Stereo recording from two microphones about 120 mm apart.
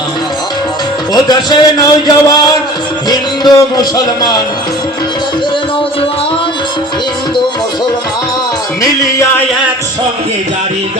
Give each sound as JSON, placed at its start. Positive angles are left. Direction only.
{"t": 1.1, "sound": "a man's voice", "side_deg": 35}
{"t": 3.1, "sound": "music", "side_deg": 35}